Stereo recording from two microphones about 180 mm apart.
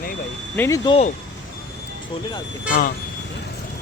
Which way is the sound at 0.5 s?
15° left (ahead or behind).